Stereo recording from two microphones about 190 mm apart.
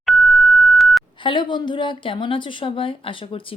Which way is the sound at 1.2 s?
25° left (ahead or behind).